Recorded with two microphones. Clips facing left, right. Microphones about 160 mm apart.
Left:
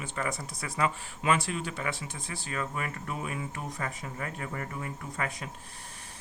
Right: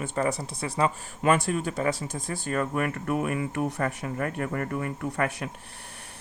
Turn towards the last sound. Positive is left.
turn(degrees=-65)  # may be behind; listen again after turning